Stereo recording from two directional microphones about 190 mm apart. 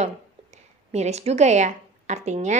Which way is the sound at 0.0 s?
35° right (ahead or behind).